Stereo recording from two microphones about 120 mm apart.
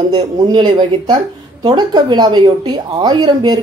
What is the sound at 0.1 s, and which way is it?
A woman's voice, 40° right (ahead or behind).